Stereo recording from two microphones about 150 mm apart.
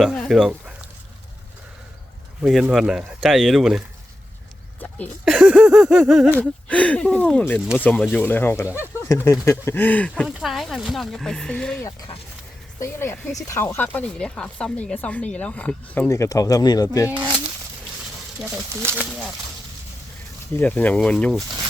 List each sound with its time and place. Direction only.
0.0 s speech: centre (ahead or behind)
2.4 s speech: centre (ahead or behind)
5.2 s speech: 5° right (ahead or behind)
6.4 s speech: 10° left (ahead or behind)
10.2 s speech: centre (ahead or behind)
12.8 s speech: 20° left (ahead or behind)
16.0 s speech: 20° left (ahead or behind)
18.9 s speech: 5° right (ahead or behind)
20.6 s speech: 10° left (ahead or behind)